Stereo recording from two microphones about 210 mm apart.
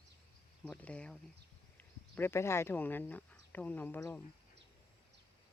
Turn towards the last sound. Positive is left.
turn(degrees=10)  # may be behind; listen again after turning